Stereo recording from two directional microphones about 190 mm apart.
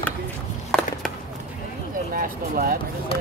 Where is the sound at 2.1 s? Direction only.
45° right (ahead or behind).